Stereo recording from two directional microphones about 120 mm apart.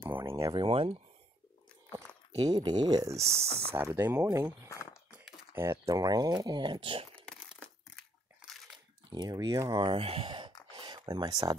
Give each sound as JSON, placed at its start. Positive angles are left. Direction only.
{"t": 0.0, "sound": "a sound", "side_deg": -20}
{"t": 0.5, "sound": "speech", "side_deg": -45}
{"t": 2.5, "sound": "speech", "side_deg": -35}
{"t": 7.2, "sound": "crumpling", "side_deg": 5}
{"t": 9.1, "sound": "speech", "side_deg": -35}
{"t": 9.8, "sound": "speech", "side_deg": -55}
{"t": 10.7, "sound": "a sound", "side_deg": -40}